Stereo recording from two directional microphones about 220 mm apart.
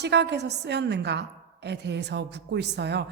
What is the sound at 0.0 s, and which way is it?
A woman's voice, 50° right (ahead or behind).